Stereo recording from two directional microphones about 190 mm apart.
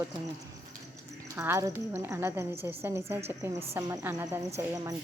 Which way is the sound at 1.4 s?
15° right (ahead or behind).